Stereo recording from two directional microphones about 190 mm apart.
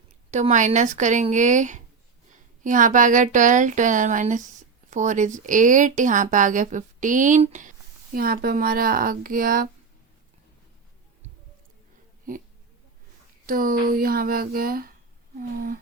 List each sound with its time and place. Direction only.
0.3 s speech: 40° right (ahead or behind)
8.1 s a woman's voice: 50° right (ahead or behind)
13.5 s a woman's voice: 45° right (ahead or behind)